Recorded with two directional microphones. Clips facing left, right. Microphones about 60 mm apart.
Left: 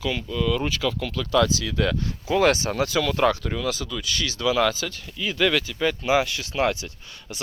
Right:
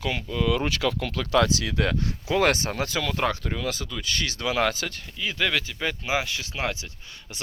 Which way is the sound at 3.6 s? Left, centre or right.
Right.